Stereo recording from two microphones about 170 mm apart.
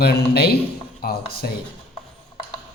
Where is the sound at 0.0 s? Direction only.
70° left (ahead or behind).